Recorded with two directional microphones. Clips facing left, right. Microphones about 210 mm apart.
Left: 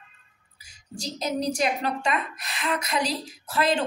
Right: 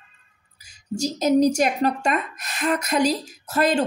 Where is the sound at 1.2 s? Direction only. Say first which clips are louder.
Right 8 dB; 45° right (ahead or behind).